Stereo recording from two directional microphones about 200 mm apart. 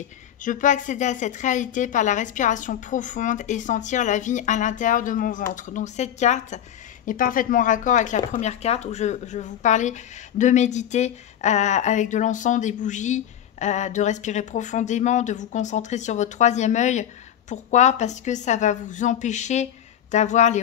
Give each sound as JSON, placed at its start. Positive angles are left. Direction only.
{"t": 0.4, "sound": "speech", "side_deg": 40}